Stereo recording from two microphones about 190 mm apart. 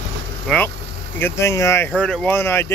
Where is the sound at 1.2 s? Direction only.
15° left (ahead or behind).